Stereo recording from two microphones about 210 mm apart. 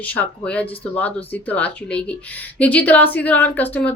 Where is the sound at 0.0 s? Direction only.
5° left (ahead or behind).